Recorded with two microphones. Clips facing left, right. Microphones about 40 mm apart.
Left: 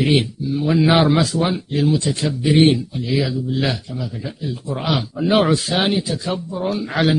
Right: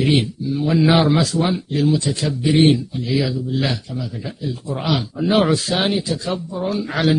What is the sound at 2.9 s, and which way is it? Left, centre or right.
Speech, centre.